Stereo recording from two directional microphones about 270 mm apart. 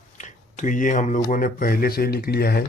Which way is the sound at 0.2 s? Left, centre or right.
Left.